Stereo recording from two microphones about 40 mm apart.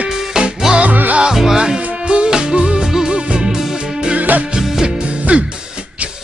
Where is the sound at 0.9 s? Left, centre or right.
Right.